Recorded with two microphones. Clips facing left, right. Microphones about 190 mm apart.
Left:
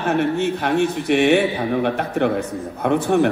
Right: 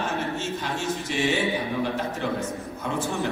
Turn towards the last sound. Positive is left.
turn(degrees=65)  # may be behind; listen again after turning